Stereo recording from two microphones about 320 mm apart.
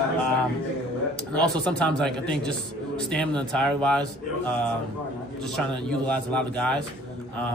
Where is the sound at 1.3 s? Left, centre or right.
Centre.